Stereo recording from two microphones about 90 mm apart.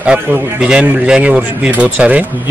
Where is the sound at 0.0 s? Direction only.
10° right (ahead or behind).